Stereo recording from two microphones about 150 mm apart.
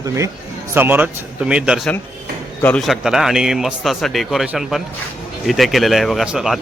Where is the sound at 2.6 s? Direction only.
10° left (ahead or behind).